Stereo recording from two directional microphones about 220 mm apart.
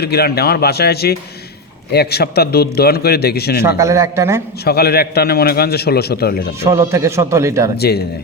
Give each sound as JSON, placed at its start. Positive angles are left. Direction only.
{"t": 0.0, "sound": "a man's voice", "side_deg": 45}
{"t": 3.6, "sound": "a man's voice", "side_deg": -15}
{"t": 4.6, "sound": "a man's voice", "side_deg": 45}
{"t": 6.7, "sound": "a man's voice", "side_deg": -15}
{"t": 7.8, "sound": "a man's voice", "side_deg": 45}